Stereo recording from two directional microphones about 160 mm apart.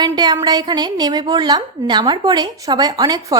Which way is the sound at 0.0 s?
25° right (ahead or behind).